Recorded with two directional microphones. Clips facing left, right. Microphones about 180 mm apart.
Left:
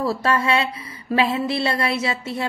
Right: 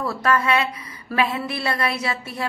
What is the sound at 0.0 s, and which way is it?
A woman's voice, 30° left (ahead or behind).